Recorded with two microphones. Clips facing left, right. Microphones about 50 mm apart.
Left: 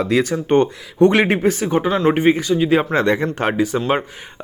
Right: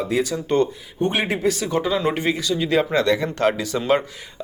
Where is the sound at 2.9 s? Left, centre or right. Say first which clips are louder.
Left 2 dB; left.